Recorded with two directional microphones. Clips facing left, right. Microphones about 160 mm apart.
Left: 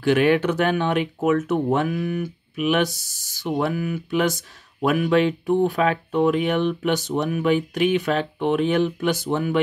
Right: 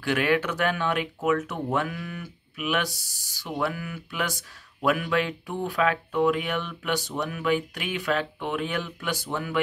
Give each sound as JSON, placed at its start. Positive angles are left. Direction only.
{"t": 0.0, "sound": "speech", "side_deg": 25}